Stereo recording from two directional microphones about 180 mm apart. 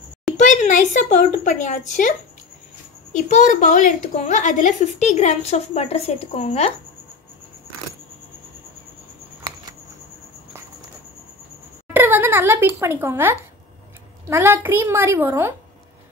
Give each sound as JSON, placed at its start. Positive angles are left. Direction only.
{"t": 0.4, "sound": "a woman's voice", "side_deg": 45}
{"t": 11.9, "sound": "a sound", "side_deg": -10}
{"t": 14.3, "sound": "a woman's voice", "side_deg": -10}